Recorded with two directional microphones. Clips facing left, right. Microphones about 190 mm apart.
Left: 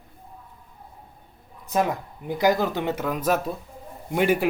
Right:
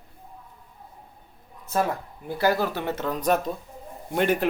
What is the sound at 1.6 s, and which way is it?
Speech, 15° left (ahead or behind).